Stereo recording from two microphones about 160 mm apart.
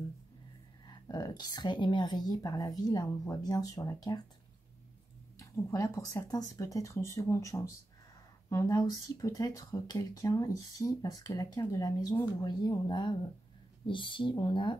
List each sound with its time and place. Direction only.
0.8 s speech: 25° left (ahead or behind)
5.4 s speech: 20° left (ahead or behind)